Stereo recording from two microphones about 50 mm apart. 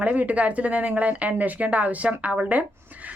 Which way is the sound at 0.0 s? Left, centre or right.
Right.